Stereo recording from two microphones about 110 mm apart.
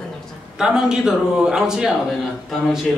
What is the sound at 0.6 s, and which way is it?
Speech, 5° right (ahead or behind).